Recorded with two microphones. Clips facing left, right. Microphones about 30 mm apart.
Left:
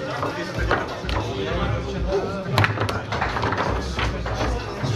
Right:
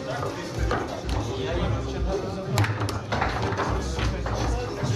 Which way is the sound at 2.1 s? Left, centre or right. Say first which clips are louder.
Left 6 dB; left.